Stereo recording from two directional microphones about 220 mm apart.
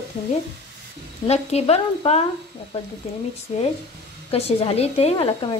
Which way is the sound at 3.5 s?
25° left (ahead or behind).